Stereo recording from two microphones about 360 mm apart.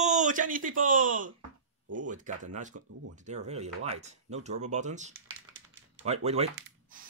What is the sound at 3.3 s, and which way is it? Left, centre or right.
Speech, centre.